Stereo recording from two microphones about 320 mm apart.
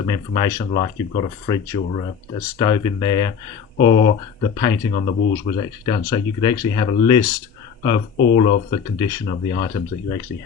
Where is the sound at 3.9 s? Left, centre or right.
Left.